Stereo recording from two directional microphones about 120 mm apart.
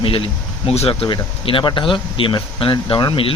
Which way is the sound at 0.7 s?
60° left (ahead or behind).